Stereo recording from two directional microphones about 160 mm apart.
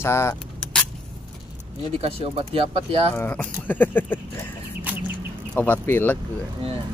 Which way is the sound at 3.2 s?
10° left (ahead or behind).